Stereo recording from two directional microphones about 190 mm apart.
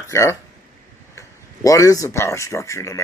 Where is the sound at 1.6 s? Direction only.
15° left (ahead or behind).